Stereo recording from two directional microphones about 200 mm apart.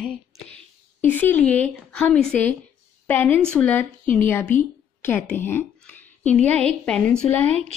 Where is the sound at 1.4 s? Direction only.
5° left (ahead or behind).